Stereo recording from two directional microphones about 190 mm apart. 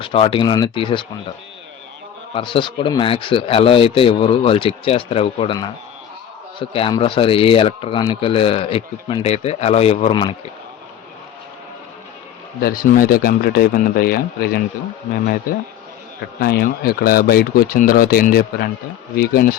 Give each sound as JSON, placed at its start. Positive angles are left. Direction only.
{"t": 0.0, "sound": "speech", "side_deg": 30}
{"t": 2.3, "sound": "speech", "side_deg": 25}
{"t": 6.6, "sound": "speech", "side_deg": 25}
{"t": 12.5, "sound": "speech", "side_deg": 50}
{"t": 16.4, "sound": "speech", "side_deg": 55}